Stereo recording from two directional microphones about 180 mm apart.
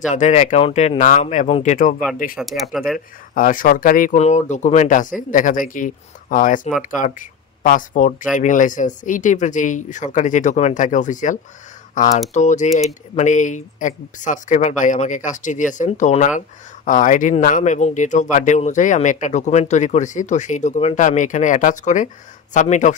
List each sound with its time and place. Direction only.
0.1 s speech: 40° left (ahead or behind)
2.3 s speech: centre (ahead or behind)
3.3 s speech: 50° left (ahead or behind)